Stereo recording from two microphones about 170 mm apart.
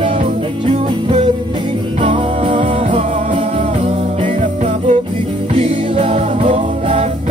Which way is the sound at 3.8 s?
45° right (ahead or behind).